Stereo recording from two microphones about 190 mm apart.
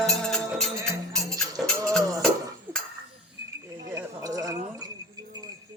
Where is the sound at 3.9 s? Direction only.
15° right (ahead or behind).